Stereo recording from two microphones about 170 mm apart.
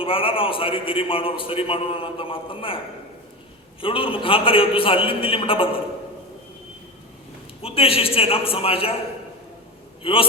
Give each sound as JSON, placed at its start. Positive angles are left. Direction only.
{"t": 0.0, "sound": "a man's voice", "side_deg": 30}
{"t": 3.8, "sound": "a man's voice", "side_deg": 30}
{"t": 7.6, "sound": "a man's voice", "side_deg": 35}
{"t": 10.0, "sound": "a man's voice", "side_deg": 30}